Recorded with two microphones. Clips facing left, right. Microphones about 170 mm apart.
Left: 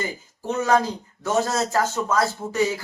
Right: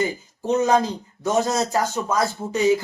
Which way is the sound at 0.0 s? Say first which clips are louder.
Right 5 dB; 20° right (ahead or behind).